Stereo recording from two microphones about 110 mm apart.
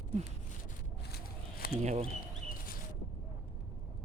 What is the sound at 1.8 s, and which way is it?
Speech, 90° right.